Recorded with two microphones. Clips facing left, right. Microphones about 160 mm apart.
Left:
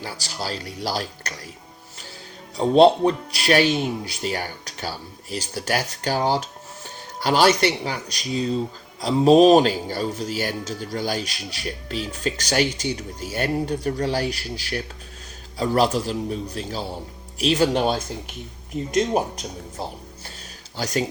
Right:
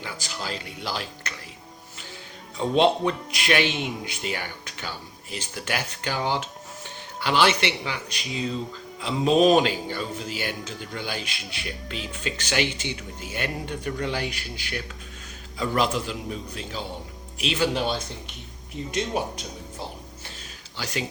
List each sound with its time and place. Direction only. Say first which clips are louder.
0.0 s speech: left 3 dB; 35° left (ahead or behind)
2.6 s speech: left 6 dB; 35° left (ahead or behind)
20.7 s speech: left 6 dB; 40° left (ahead or behind)